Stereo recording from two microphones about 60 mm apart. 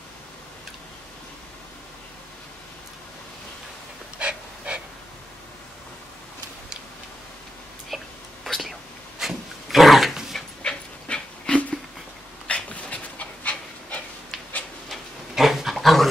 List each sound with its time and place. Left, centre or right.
4.2 s dog: centre
7.9 s whispering: centre
9.2 s dog: centre
10.6 s dog: centre
14.9 s dog: centre